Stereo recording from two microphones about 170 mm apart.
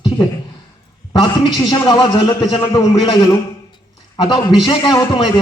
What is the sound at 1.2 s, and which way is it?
A man's voice, 25° left (ahead or behind).